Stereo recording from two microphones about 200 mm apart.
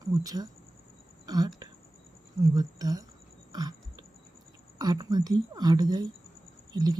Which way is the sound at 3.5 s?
20° right (ahead or behind).